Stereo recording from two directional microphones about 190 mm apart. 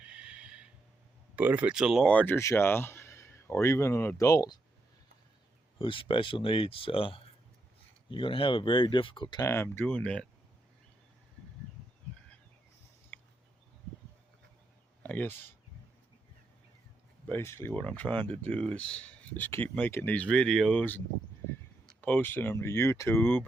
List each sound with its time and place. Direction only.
0.0 s neigh: 5° right (ahead or behind)
1.4 s speech: 10° right (ahead or behind); by 4.6 s 20° left (ahead or behind)
5.8 s speech: 25° left (ahead or behind); by 10.2 s 5° left (ahead or behind)
13.1 s a sound: 10° left (ahead or behind)
15.0 s a sound: 10° left (ahead or behind)
17.2 s speech: 15° left (ahead or behind)
22.0 s speech: 10° left (ahead or behind)